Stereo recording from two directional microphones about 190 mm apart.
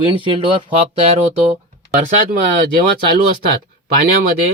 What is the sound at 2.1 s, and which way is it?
Speech, 45° right (ahead or behind).